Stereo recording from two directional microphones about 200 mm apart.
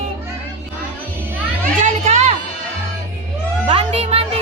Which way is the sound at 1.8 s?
35° right (ahead or behind).